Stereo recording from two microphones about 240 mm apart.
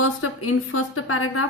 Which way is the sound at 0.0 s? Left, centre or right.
Left.